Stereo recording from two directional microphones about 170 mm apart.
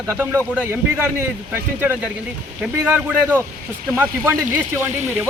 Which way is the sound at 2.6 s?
10° right (ahead or behind).